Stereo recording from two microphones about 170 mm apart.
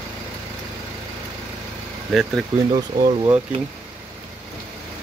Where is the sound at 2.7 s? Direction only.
25° right (ahead or behind).